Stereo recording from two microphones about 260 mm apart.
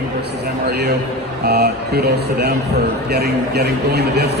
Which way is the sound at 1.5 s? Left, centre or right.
Right.